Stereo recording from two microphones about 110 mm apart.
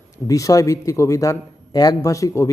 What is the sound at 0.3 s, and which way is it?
A man's voice, 30° left (ahead or behind).